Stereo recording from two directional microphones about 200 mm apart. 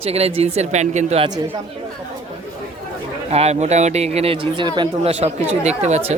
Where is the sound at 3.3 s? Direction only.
30° right (ahead or behind).